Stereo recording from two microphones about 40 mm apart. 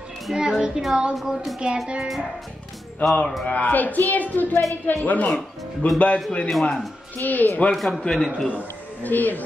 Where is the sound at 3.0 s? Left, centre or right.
Left.